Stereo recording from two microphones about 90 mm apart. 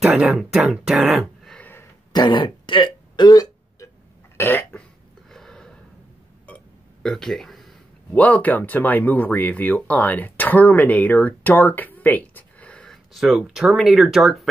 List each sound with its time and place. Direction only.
0.0 s speech: 10° right (ahead or behind)
1.2 s a sound: 10° left (ahead or behind)
2.1 s speech: 60° left (ahead or behind)
4.4 s cough: 25° left (ahead or behind)
5.3 s a sound: 5° left (ahead or behind)
8.1 s speech: 15° left (ahead or behind); by 14.5 s centre (ahead or behind)